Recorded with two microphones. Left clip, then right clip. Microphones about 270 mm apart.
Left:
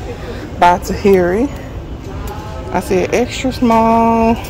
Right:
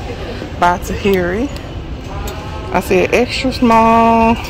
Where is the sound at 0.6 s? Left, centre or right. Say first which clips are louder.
Left 3 dB; centre.